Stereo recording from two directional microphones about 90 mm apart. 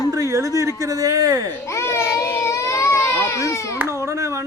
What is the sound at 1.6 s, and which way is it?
Baby cry, 35° left (ahead or behind).